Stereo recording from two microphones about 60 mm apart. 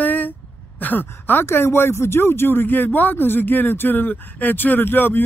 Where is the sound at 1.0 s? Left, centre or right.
Left.